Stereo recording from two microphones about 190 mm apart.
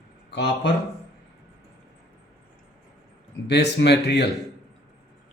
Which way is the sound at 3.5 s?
65° left (ahead or behind).